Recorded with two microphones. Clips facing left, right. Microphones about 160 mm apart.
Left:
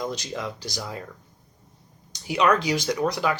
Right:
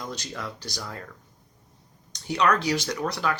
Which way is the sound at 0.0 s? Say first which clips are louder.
Left 5 dB; 15° left (ahead or behind).